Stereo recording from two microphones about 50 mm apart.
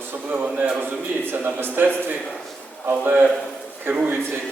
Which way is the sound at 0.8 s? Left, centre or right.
Right.